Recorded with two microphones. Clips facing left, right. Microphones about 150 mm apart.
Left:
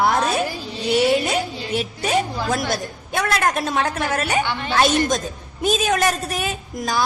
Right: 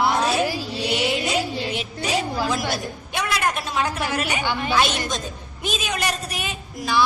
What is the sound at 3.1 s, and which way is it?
A woman's voice, 45° left (ahead or behind).